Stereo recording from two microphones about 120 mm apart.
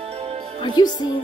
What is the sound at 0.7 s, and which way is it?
Speech, 35° left (ahead or behind).